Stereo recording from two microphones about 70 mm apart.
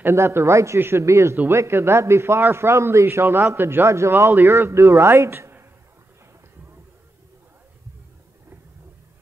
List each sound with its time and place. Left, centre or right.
0.0 s a man's voice: right